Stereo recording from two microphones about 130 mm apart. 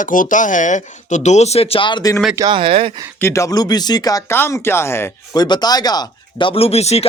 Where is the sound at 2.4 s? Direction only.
35° right (ahead or behind).